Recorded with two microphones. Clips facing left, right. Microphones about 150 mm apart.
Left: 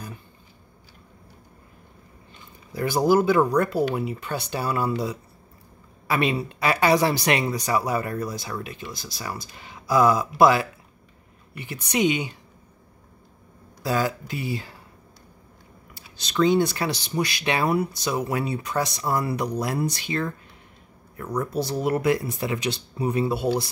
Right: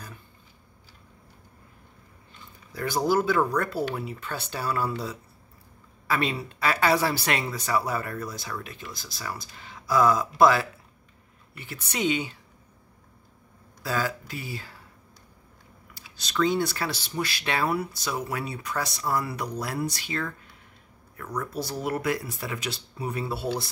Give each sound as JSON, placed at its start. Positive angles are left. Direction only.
{"t": 2.7, "sound": "speech", "side_deg": 15}
{"t": 13.8, "sound": "speech", "side_deg": 20}
{"t": 15.9, "sound": "speech", "side_deg": 20}